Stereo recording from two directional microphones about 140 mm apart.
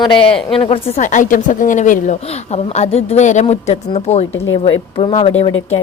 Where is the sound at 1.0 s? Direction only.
65° left (ahead or behind).